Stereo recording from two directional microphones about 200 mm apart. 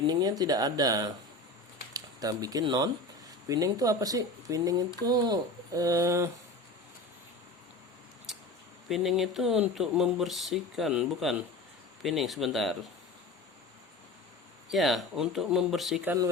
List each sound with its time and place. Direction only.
0.1 s speech: 20° right (ahead or behind)
8.9 s speech: centre (ahead or behind)
14.7 s speech: centre (ahead or behind)